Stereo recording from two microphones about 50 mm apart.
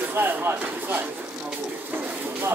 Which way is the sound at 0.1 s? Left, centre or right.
Right.